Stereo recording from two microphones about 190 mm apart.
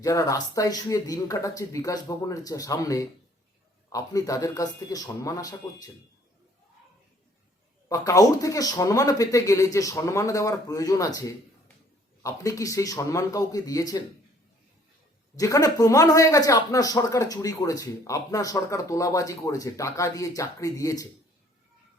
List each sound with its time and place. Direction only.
0.0 s speech: 15° left (ahead or behind)
7.9 s speech: 20° left (ahead or behind)
15.4 s speech: 20° left (ahead or behind)